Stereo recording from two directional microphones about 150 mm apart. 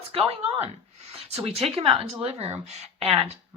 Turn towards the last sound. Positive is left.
turn(degrees=-45)  # may be behind; listen again after turning